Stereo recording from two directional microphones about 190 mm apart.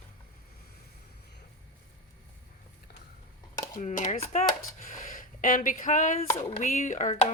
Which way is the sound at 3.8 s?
40° left (ahead or behind).